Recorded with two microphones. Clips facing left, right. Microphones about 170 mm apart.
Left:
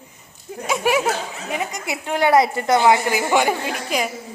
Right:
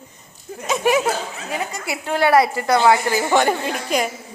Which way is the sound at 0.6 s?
10° left (ahead or behind).